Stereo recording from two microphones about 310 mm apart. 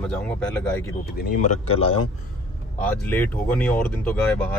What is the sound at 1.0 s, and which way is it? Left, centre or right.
Speech, left.